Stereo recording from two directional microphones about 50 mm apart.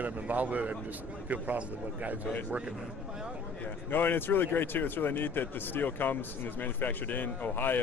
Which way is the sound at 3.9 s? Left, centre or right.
Left.